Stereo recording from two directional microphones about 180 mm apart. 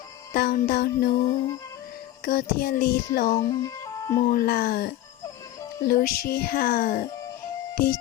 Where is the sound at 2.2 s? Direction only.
55° left (ahead or behind).